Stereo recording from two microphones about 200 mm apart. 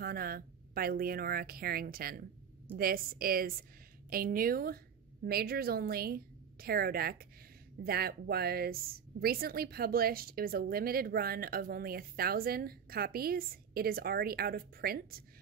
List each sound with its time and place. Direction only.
0.0 s a woman's voice: 50° right (ahead or behind)